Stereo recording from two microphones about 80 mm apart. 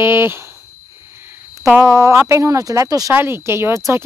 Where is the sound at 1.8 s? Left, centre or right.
Right.